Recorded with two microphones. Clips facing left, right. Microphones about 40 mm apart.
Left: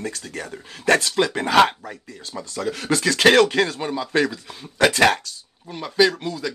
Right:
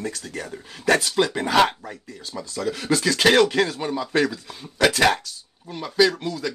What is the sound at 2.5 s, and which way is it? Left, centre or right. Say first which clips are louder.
Speech: even; left.